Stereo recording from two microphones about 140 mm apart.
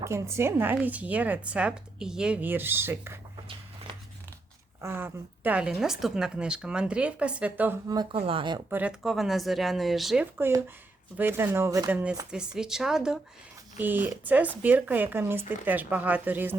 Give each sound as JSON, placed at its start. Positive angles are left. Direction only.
{"t": 0.0, "sound": "speech", "side_deg": -20}
{"t": 4.8, "sound": "speech", "side_deg": -15}
{"t": 7.9, "sound": "speech", "side_deg": -30}
{"t": 9.0, "sound": "speech", "side_deg": 0}